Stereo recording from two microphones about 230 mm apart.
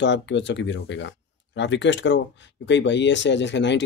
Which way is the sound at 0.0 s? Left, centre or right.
Left.